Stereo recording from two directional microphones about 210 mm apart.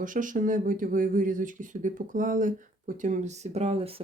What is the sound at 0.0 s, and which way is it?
Speech, 40° right (ahead or behind).